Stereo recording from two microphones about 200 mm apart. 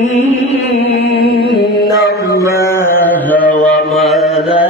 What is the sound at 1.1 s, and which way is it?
Music, 55° left (ahead or behind).